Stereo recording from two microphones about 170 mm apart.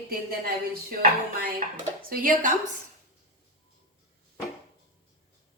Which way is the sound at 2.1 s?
55° right (ahead or behind).